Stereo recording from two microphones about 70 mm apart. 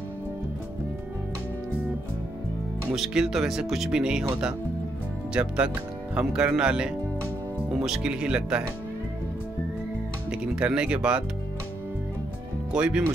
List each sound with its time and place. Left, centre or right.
2.9 s speech: centre
10.3 s speech: centre
12.7 s speech: centre